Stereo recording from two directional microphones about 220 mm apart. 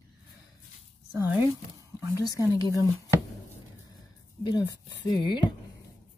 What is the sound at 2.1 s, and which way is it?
Speech, 15° left (ahead or behind).